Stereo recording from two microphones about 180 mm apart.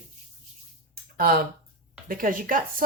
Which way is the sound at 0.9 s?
55° right (ahead or behind).